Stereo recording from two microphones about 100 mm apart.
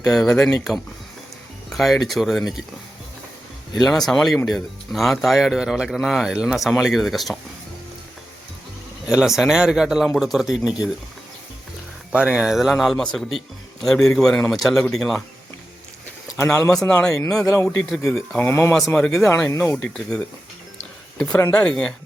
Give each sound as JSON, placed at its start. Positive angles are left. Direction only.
{"t": 0.0, "sound": "speech", "side_deg": 5}
{"t": 3.8, "sound": "speech", "side_deg": 5}
{"t": 9.0, "sound": "speech", "side_deg": -5}
{"t": 12.1, "sound": "speech", "side_deg": -10}
{"t": 16.4, "sound": "speech", "side_deg": 25}
{"t": 16.8, "sound": "speech", "side_deg": 10}
{"t": 17.4, "sound": "speech", "side_deg": 30}
{"t": 17.7, "sound": "speech", "side_deg": 5}
{"t": 18.3, "sound": "speech", "side_deg": 20}
{"t": 18.9, "sound": "speech", "side_deg": 5}
{"t": 19.5, "sound": "speech", "side_deg": 20}
{"t": 19.7, "sound": "speech", "side_deg": 5}
{"t": 21.5, "sound": "speech", "side_deg": 10}